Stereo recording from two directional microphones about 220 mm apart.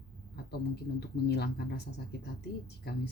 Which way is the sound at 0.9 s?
50° left (ahead or behind).